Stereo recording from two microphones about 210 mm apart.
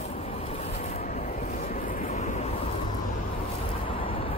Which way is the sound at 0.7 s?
30° left (ahead or behind).